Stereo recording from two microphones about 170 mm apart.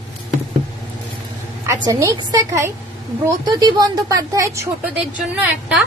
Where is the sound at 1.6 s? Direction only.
20° right (ahead or behind).